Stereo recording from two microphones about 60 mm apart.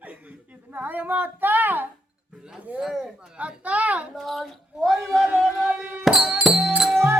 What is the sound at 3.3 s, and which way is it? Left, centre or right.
Speech, right.